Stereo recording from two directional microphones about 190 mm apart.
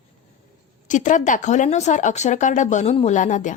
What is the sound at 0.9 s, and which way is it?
A woman's voice, 40° left (ahead or behind).